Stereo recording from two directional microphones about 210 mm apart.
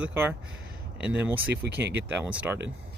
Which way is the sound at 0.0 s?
10° right (ahead or behind).